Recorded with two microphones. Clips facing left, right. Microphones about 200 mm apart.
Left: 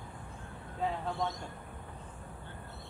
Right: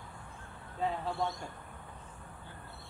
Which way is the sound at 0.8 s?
Centre (ahead or behind).